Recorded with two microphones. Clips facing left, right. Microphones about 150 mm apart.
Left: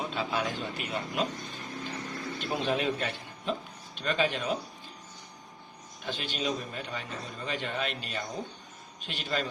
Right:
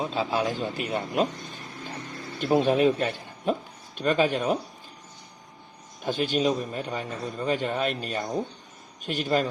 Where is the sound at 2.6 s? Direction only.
45° right (ahead or behind).